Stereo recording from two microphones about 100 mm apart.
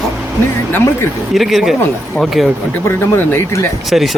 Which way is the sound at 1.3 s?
Centre (ahead or behind).